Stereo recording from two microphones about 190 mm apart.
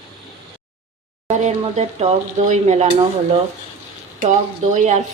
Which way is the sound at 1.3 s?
35° right (ahead or behind).